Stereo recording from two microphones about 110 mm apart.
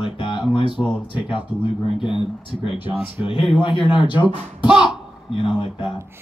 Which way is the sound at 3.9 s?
45° left (ahead or behind).